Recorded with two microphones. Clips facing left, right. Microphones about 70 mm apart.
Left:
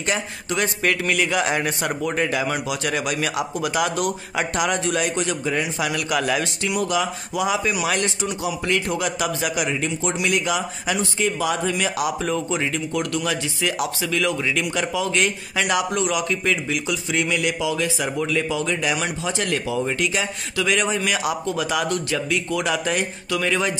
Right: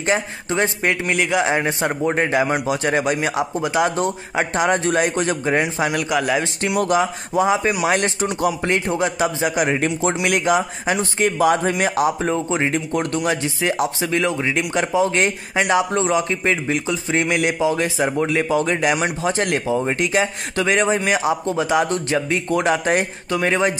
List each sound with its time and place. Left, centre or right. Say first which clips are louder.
0.0 s a man's voice: right 4 dB; right
6.0 s a man's voice: right 2 dB; centre
6.9 s a man's voice: right 5 dB; right